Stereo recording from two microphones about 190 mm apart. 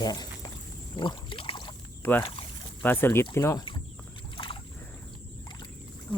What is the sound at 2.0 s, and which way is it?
Speech, 10° left (ahead or behind).